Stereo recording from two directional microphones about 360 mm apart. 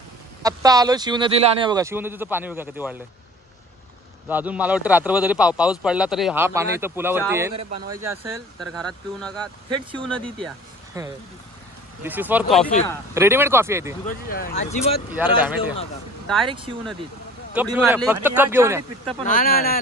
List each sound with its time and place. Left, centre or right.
0.4 s speech: centre
4.3 s speech: centre
10.9 s speech: centre
13.1 s speech: centre
14.0 s speech: left
15.1 s speech: centre
19.2 s speech: left